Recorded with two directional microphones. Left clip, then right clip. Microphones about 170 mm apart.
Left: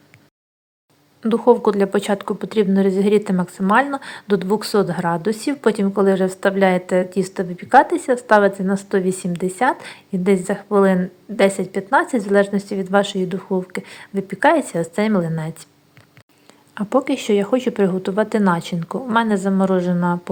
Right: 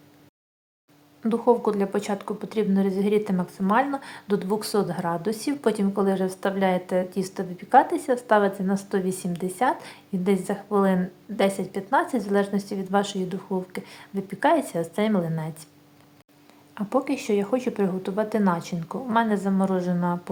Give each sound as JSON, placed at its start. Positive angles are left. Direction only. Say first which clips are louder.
{"t": 1.3, "sound": "a woman's voice", "louder": "left 7 dB", "side_deg": 20}
{"t": 16.7, "sound": "a woman's voice", "louder": "left 6 dB", "side_deg": 20}